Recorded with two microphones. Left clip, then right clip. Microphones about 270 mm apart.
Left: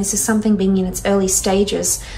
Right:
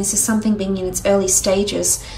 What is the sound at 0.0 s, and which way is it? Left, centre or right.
A woman's voice, right.